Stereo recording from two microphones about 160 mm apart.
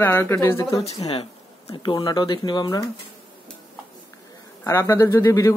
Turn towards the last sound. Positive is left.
turn(degrees=15)  # may be behind; listen again after turning